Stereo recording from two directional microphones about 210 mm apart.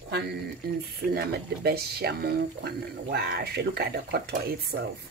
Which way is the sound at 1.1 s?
50° right (ahead or behind).